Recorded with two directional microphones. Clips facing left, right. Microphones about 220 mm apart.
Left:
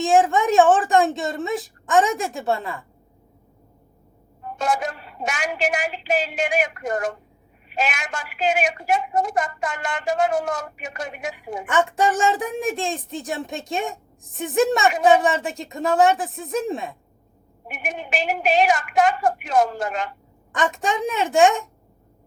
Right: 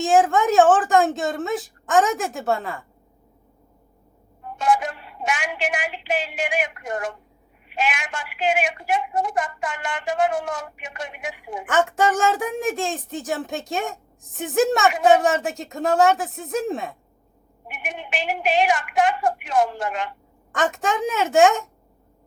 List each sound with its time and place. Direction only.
0.0 s speech: centre (ahead or behind)
4.5 s a woman's voice: 40° left (ahead or behind)
11.7 s speech: centre (ahead or behind)
17.7 s a woman's voice: 40° left (ahead or behind)
20.5 s speech: centre (ahead or behind)